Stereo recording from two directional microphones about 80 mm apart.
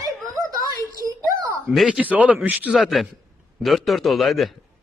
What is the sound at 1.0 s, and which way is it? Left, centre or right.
Speech, right.